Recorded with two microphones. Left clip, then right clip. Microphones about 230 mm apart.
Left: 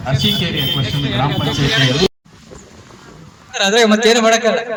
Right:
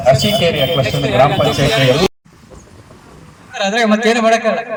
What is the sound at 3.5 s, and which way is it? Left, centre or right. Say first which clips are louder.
A man's voice: left 2 dB; centre.